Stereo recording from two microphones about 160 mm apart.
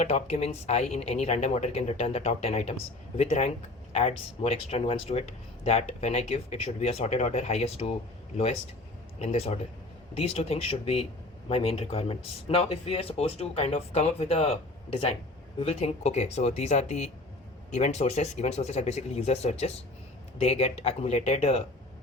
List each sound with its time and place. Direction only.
0.0 s speech: 40° left (ahead or behind)
9.1 s speech: 40° left (ahead or behind)